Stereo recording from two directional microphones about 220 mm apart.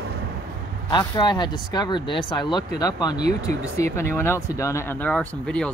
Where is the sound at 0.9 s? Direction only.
20° left (ahead or behind).